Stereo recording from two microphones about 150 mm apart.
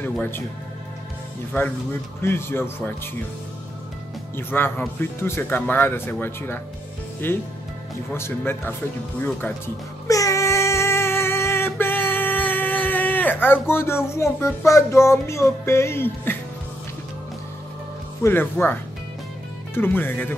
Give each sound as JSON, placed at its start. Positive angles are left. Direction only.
{"t": 0.0, "sound": "speech", "side_deg": 15}
{"t": 2.2, "sound": "speech", "side_deg": 15}
{"t": 4.4, "sound": "speech", "side_deg": 15}
{"t": 10.0, "sound": "child singing", "side_deg": 20}
{"t": 18.2, "sound": "speech", "side_deg": 15}